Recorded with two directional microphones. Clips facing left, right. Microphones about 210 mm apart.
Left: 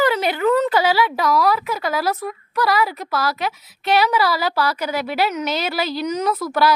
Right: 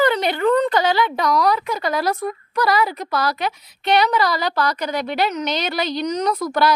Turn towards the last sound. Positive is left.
turn(degrees=5)  # may be behind; listen again after turning